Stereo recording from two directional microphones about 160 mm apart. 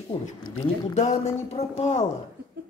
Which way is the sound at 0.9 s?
40° left (ahead or behind).